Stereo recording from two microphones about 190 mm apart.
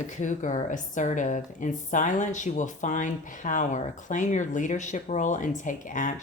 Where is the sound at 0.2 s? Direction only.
40° left (ahead or behind).